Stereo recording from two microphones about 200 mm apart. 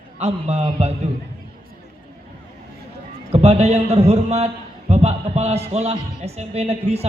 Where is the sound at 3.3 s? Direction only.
30° right (ahead or behind).